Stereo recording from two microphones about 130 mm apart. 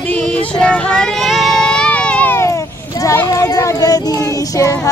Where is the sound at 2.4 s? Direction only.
25° left (ahead or behind).